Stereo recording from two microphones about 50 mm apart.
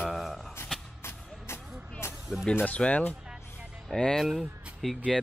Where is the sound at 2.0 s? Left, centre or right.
Left.